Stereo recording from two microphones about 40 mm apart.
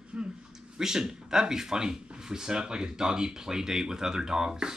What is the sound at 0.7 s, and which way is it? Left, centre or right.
Speech, centre.